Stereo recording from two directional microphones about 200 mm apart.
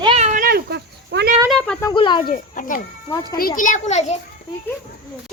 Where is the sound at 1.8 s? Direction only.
25° left (ahead or behind).